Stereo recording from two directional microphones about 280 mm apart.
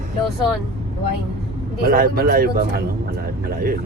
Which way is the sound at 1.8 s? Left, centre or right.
Right.